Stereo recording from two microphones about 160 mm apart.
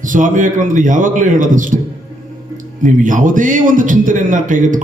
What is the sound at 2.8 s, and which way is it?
A man's voice, 55° right (ahead or behind).